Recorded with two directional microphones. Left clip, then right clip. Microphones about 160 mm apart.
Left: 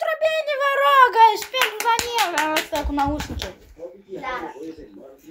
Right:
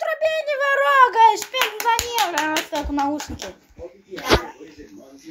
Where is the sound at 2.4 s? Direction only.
Centre (ahead or behind).